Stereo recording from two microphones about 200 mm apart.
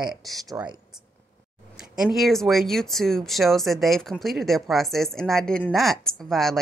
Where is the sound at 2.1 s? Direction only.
Centre (ahead or behind).